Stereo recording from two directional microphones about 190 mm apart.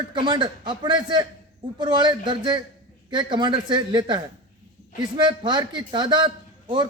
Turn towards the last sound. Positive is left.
turn(degrees=-25)  # may be behind; listen again after turning